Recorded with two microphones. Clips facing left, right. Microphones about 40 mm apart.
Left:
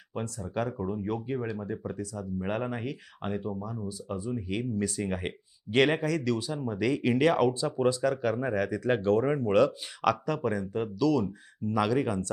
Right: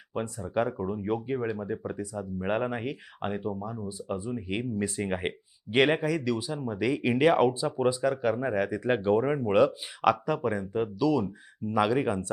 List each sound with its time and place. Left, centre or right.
0.1 s speech: centre